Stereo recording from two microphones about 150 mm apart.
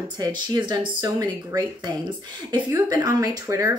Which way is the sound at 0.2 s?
30° right (ahead or behind).